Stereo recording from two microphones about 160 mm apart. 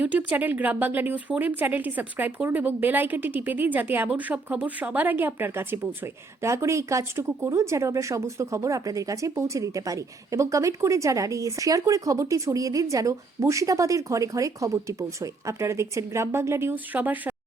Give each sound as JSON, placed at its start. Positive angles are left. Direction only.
{"t": 0.0, "sound": "speech", "side_deg": -10}